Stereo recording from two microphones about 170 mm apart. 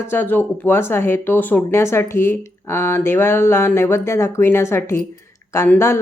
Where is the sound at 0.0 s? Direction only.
15° left (ahead or behind).